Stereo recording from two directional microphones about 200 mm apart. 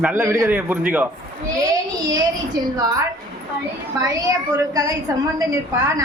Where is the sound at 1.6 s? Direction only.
20° right (ahead or behind).